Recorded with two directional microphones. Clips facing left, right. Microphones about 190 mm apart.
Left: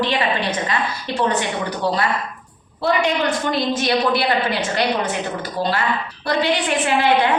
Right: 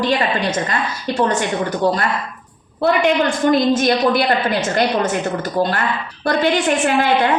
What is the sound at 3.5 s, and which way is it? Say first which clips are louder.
A woman's voice: right 4 dB; 50° right (ahead or behind).